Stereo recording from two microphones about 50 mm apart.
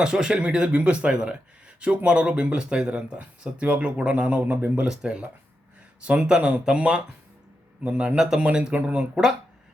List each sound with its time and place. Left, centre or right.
0.0 s speech: centre
4.9 s speech: right
8.1 s speech: centre
8.7 s speech: right